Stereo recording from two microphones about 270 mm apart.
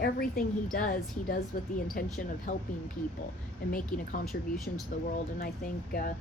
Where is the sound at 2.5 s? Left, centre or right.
Left.